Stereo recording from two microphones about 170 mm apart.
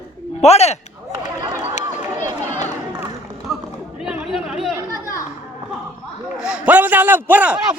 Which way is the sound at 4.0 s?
5° right (ahead or behind).